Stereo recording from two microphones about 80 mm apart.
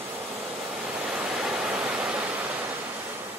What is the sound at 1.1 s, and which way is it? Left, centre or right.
Waterfall, centre.